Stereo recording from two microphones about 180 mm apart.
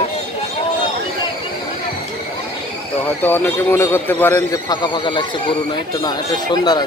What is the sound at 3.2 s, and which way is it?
A man's voice, 10° left (ahead or behind).